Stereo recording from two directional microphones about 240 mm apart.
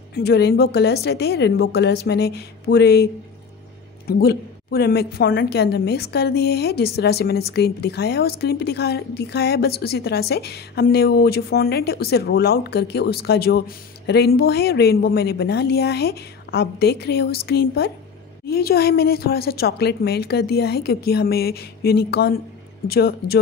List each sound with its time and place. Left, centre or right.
0.1 s a woman's voice: left
4.1 s a woman's voice: left